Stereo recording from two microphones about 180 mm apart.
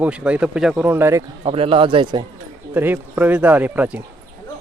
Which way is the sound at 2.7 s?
10° right (ahead or behind).